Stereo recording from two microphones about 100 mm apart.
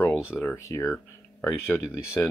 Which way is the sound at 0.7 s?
30° left (ahead or behind).